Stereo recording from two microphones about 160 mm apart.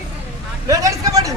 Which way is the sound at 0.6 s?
20° right (ahead or behind).